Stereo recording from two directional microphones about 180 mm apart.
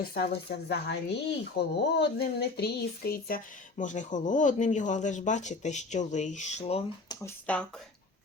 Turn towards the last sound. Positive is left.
turn(degrees=5)  # may be behind; listen again after turning